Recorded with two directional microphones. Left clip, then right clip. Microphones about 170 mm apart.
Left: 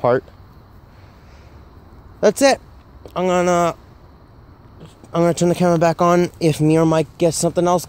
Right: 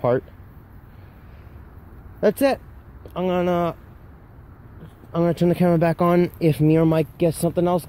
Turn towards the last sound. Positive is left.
turn(degrees=15)  # may be behind; listen again after turning